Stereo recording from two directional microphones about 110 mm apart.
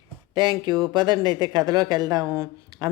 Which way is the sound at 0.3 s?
40° right (ahead or behind).